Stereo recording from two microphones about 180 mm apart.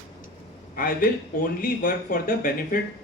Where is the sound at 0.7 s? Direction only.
55° left (ahead or behind).